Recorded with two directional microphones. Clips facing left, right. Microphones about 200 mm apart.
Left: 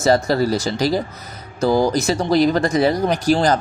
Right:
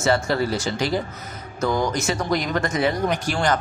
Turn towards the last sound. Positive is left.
turn(degrees=35)  # may be behind; listen again after turning